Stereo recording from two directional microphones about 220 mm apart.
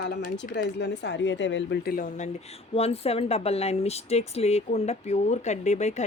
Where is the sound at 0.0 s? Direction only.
50° left (ahead or behind).